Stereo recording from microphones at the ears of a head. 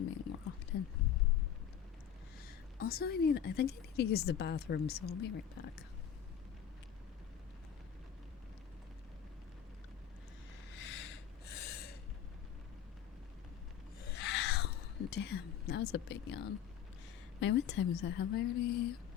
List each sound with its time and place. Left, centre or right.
0.0 s a sound: left
2.7 s speech: left
10.7 s snort: left
14.0 s whispering: left
17.4 s speech: left